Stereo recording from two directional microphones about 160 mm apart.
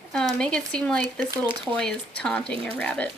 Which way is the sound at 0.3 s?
5° left (ahead or behind).